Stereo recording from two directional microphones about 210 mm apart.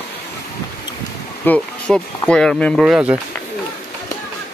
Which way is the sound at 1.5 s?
5° left (ahead or behind).